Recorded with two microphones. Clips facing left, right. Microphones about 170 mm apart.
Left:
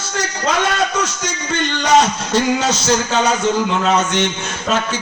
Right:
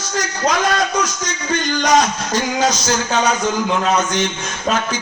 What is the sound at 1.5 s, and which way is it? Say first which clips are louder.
A man's voice: left 1 dB; 25° left (ahead or behind).